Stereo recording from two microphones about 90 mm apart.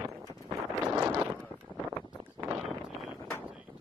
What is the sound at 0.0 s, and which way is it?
Clip-clop, 40° right (ahead or behind).